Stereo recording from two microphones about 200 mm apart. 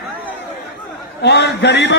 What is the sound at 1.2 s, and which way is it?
Speech, 60° left (ahead or behind).